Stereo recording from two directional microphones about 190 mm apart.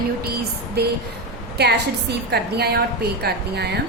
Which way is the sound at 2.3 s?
60° right (ahead or behind).